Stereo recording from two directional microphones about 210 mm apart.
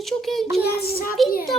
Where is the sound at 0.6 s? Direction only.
45° left (ahead or behind).